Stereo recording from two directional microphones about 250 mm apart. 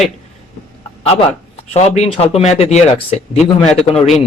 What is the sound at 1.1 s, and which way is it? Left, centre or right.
Speech, left.